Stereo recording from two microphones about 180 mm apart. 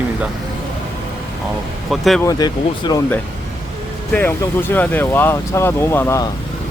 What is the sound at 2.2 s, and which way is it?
Speech, 20° left (ahead or behind).